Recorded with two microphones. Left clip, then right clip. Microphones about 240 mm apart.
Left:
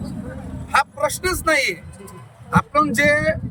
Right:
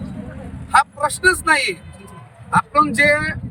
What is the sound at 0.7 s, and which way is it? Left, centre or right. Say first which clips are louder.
A man's voice: right 3 dB; centre.